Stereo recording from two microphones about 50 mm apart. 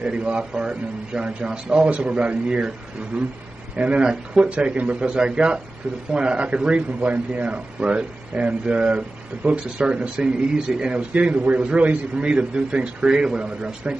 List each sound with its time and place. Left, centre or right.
0.0 s a man's voice: centre
3.7 s a man's voice: right